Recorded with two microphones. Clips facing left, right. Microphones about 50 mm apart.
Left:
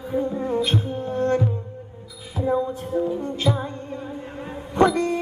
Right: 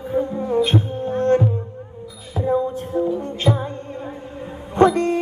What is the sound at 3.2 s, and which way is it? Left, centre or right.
Music, right.